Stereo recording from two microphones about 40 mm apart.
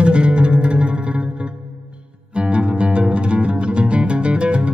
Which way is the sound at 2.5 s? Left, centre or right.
Right.